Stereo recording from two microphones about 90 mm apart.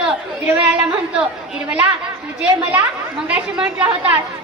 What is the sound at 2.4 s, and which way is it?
A woman's voice, 20° right (ahead or behind).